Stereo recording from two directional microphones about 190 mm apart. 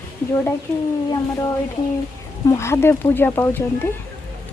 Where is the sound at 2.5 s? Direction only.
15° left (ahead or behind).